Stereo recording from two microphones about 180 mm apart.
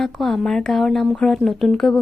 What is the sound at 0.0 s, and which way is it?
A woman's voice, centre (ahead or behind).